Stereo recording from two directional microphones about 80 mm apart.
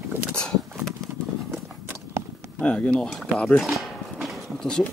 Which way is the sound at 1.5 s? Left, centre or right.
Right.